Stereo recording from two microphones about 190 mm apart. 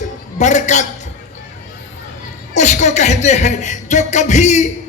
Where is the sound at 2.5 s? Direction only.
35° left (ahead or behind).